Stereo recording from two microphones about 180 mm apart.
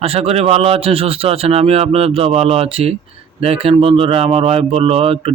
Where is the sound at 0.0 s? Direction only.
35° right (ahead or behind).